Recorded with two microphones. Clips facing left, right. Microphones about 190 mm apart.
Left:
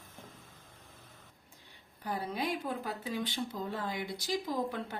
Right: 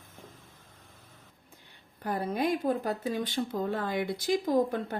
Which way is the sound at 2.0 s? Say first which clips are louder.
Right 6 dB; 50° right (ahead or behind).